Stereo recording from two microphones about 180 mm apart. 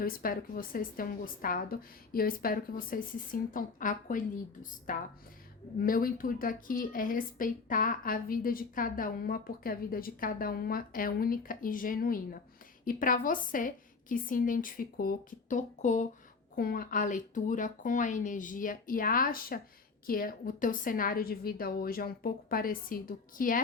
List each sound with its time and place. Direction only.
0.0 s a woman's voice: 55° left (ahead or behind)
16.6 s a woman's voice: 55° left (ahead or behind)